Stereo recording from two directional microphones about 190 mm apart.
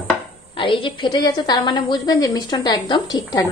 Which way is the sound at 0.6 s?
25° left (ahead or behind).